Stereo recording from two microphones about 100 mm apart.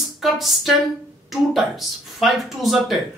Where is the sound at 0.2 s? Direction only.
Centre (ahead or behind).